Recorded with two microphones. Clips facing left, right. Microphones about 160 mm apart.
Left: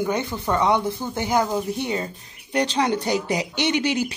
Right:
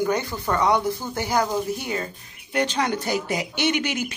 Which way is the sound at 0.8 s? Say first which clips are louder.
Even; 10° right (ahead or behind).